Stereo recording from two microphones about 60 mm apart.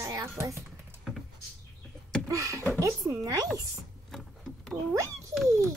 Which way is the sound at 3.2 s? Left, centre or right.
Right.